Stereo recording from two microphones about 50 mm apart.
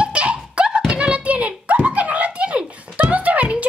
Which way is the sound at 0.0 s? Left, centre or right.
Right.